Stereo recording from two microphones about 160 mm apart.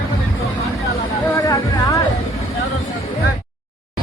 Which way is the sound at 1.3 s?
20° left (ahead or behind).